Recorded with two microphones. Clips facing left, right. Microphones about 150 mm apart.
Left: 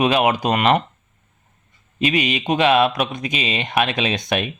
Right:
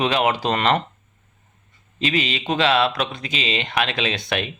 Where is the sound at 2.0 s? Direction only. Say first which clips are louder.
Left 3 dB; 15° left (ahead or behind).